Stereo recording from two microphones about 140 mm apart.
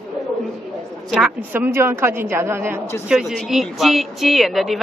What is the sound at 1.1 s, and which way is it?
A woman's voice, 10° right (ahead or behind).